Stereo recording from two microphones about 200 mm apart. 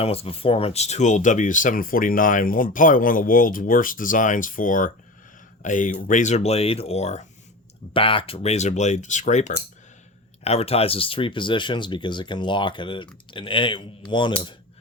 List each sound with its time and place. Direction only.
0.0 s speech: 30° left (ahead or behind)